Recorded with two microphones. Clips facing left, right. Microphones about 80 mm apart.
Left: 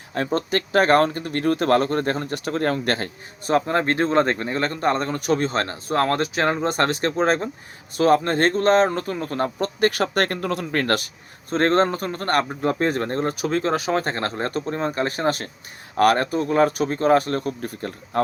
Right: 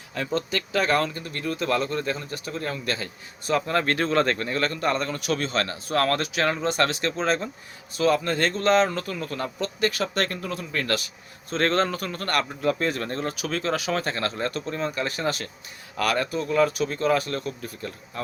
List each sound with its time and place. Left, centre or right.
0.3 s speech: left
3.7 s speech: left